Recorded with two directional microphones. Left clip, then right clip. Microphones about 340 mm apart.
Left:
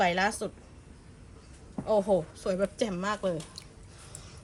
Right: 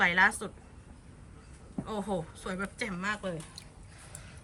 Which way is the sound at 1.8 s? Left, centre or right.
Centre.